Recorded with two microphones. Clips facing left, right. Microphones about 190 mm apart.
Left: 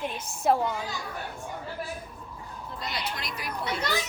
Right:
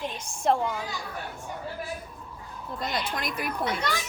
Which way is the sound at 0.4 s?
5° left (ahead or behind).